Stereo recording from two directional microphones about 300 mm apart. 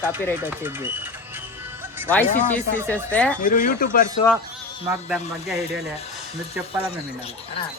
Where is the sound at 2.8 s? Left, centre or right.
Centre.